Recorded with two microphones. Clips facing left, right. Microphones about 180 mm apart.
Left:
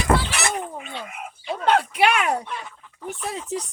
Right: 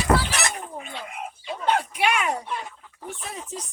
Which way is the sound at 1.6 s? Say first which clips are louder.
Left 4 dB; 70° left (ahead or behind).